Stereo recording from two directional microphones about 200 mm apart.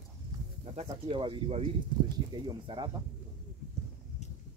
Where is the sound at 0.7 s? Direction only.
30° right (ahead or behind).